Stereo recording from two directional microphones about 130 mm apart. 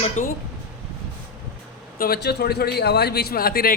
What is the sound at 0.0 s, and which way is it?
Speech, 90° left.